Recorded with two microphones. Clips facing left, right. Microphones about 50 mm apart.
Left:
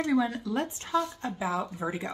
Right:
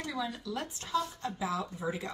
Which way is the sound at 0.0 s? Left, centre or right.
Left.